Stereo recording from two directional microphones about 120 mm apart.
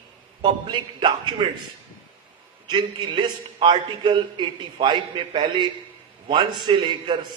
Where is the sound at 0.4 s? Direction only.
40° right (ahead or behind).